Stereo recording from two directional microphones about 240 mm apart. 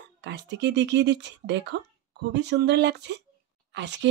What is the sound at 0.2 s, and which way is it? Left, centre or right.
Speech, right.